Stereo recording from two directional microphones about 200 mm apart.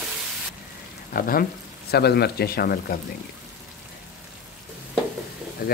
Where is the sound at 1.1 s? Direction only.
45° left (ahead or behind).